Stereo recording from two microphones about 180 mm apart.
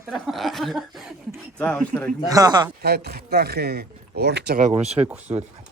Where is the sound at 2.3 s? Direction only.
20° right (ahead or behind).